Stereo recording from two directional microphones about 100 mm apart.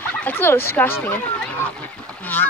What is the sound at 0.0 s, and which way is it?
Speech, 15° left (ahead or behind).